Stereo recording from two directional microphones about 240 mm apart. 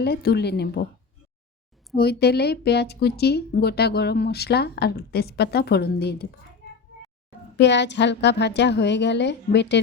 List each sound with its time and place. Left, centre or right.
0.0 s a woman's voice: left
2.0 s a woman's voice: left
7.5 s a woman's voice: left